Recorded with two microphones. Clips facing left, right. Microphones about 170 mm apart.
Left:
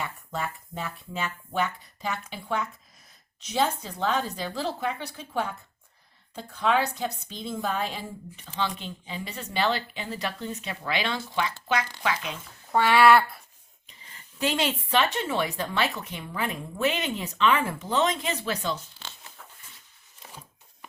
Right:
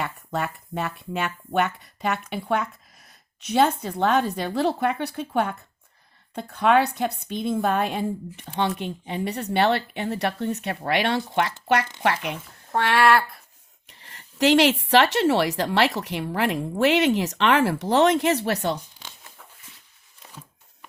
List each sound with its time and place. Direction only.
0.0 s a woman's voice: 65° right (ahead or behind)
12.7 s speech: centre (ahead or behind)
13.8 s speech: 75° right (ahead or behind)
18.8 s a sound: 15° right (ahead or behind)